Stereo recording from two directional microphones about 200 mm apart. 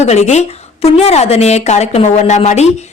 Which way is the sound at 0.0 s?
35° left (ahead or behind).